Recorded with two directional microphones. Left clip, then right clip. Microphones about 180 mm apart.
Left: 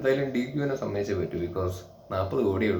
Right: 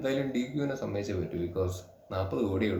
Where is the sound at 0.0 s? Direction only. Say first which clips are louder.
Left 5 dB; 10° right (ahead or behind).